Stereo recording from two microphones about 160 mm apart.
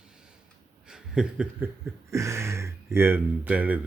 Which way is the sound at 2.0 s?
20° right (ahead or behind).